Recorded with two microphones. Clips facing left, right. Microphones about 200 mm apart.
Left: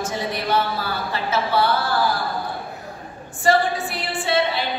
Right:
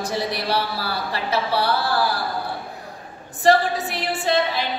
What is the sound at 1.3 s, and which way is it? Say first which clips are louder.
Speech: left 1 dB; 35° right (ahead or behind).